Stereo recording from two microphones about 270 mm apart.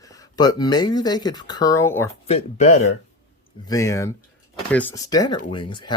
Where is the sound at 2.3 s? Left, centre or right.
Left.